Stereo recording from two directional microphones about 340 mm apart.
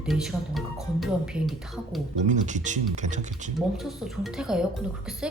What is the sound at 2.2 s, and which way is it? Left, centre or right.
Speech, right.